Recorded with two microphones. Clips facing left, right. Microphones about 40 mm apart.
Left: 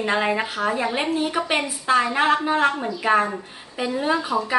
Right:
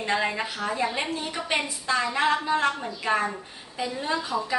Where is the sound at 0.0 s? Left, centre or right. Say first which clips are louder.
Left 4 dB; left.